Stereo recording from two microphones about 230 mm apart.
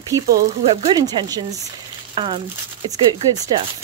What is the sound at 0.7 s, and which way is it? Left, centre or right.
A woman's voice, centre.